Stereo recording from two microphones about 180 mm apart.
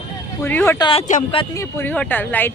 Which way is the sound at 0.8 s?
30° left (ahead or behind).